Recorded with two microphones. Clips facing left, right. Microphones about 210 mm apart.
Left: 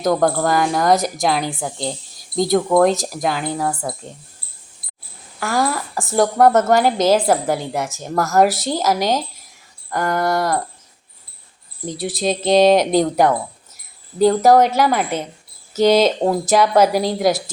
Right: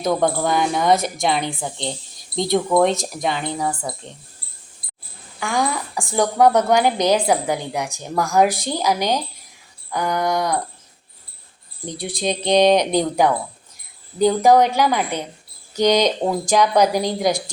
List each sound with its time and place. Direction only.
0.0 s a woman's voice: centre (ahead or behind)
5.4 s a woman's voice: 5° left (ahead or behind)
9.9 s a woman's voice: centre (ahead or behind)
11.9 s a woman's voice: centre (ahead or behind)